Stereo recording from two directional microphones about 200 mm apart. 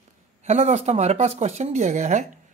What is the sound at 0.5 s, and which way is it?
Speech, 30° right (ahead or behind).